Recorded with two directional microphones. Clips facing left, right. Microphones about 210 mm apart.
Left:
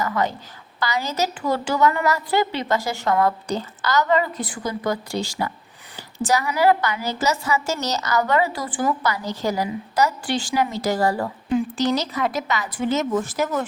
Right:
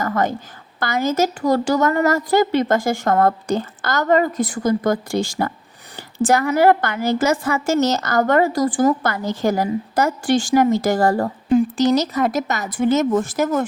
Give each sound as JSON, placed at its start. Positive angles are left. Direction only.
{"t": 0.0, "sound": "a woman's voice", "side_deg": -50}